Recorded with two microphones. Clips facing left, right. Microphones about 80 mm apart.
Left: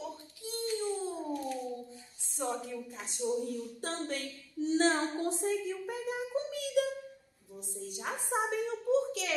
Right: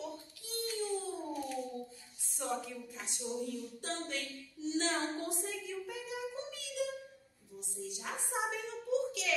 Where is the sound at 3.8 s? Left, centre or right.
Left.